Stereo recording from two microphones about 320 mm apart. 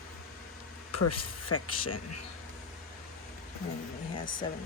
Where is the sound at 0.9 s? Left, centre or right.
Left.